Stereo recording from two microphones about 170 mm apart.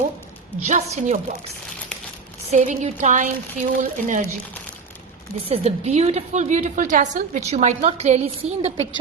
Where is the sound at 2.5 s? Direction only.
45° right (ahead or behind).